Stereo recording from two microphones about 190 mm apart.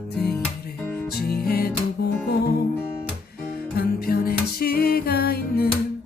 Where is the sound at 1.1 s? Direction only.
55° left (ahead or behind).